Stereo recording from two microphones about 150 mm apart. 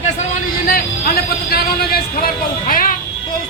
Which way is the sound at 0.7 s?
80° left.